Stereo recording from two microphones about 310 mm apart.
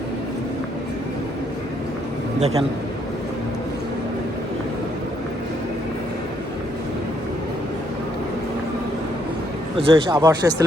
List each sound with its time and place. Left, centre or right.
2.4 s a man's voice: centre
9.7 s speech: centre